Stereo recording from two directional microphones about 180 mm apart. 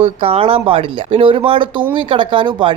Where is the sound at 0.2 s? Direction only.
30° right (ahead or behind).